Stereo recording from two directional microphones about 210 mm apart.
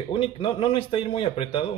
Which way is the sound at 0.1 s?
25° left (ahead or behind).